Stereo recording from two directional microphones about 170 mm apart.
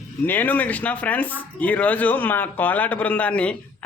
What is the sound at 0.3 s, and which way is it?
Speech, 10° left (ahead or behind).